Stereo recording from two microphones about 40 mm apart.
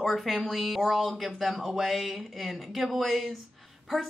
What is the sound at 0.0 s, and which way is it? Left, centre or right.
A woman's voice, centre.